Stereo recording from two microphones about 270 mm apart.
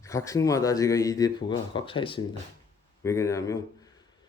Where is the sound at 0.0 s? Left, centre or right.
Centre.